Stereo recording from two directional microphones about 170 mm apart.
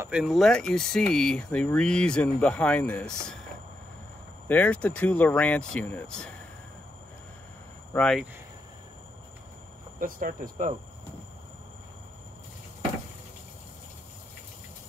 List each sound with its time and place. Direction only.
0.0 s speech: 5° right (ahead or behind)
4.5 s speech: 10° left (ahead or behind)
7.9 s speech: 5° left (ahead or behind)
9.9 s speech: 55° right (ahead or behind)